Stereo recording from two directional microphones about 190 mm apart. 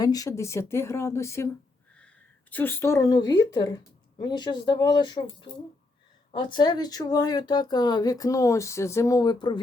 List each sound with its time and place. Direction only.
0.0 s speech: 20° left (ahead or behind)
2.0 s a sound: 5° left (ahead or behind)
3.5 s speech: 20° left (ahead or behind)